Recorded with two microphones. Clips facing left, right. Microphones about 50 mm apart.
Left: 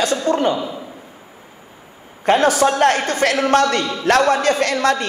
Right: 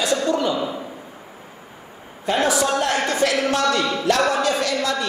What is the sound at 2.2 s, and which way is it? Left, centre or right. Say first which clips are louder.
A man's voice: left 5 dB; left.